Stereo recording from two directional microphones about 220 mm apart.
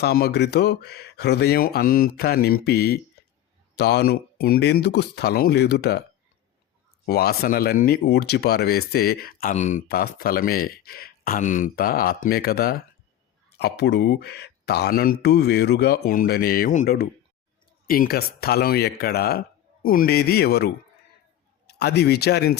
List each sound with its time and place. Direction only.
0.0 s speech: 45° left (ahead or behind)
7.0 s speech: 45° left (ahead or behind)
21.8 s speech: 45° left (ahead or behind)